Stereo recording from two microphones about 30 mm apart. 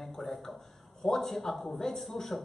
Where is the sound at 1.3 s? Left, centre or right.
Centre.